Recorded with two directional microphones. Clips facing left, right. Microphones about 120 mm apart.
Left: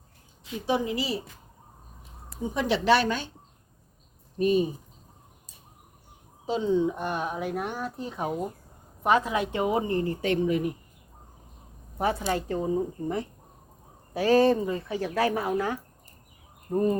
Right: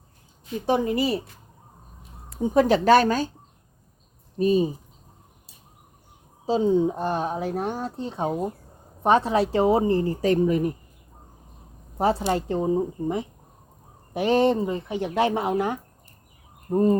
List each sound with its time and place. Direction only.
0.6 s speech: 50° right (ahead or behind)
2.5 s speech: 45° right (ahead or behind)
4.4 s speech: 30° right (ahead or behind)
6.4 s speech: 35° right (ahead or behind)
11.9 s a woman's voice: 30° right (ahead or behind)